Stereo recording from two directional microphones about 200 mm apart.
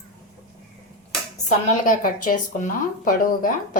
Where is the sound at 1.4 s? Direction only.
40° left (ahead or behind).